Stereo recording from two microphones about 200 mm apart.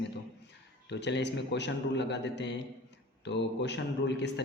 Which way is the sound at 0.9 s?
60° left (ahead or behind).